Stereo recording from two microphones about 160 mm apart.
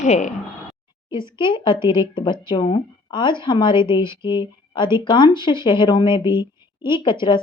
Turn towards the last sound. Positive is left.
turn(degrees=30)  # may be behind; listen again after turning